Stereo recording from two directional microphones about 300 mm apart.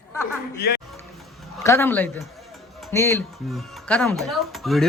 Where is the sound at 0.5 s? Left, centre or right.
Left.